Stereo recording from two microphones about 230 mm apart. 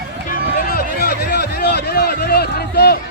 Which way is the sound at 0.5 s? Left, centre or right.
Left.